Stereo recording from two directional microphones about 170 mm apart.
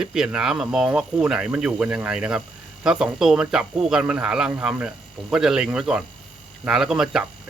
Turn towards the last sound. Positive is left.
turn(degrees=-5)  # may be behind; listen again after turning